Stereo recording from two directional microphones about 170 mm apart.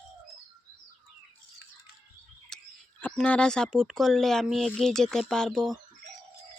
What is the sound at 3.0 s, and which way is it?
Speech, 5° left (ahead or behind).